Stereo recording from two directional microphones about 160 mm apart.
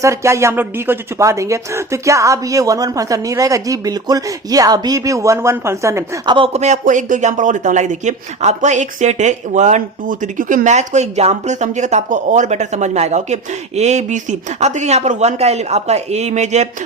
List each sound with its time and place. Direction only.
0.0 s speech: 20° right (ahead or behind)
6.3 s speech: 40° right (ahead or behind)